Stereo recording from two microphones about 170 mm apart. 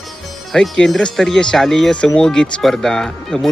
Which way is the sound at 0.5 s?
Centre (ahead or behind).